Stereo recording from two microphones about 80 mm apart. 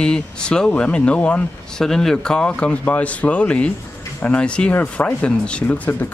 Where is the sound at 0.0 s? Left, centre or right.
Centre.